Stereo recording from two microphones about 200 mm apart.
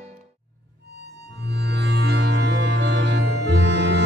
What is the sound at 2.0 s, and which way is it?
Music, 60° right (ahead or behind).